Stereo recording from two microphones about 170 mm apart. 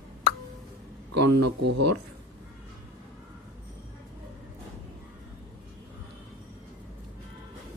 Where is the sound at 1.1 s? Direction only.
90° right.